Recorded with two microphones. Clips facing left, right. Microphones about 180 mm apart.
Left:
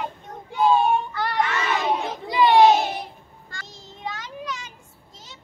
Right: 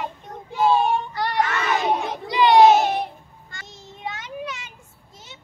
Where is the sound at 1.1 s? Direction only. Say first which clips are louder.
Right 1 dB; 35° right (ahead or behind).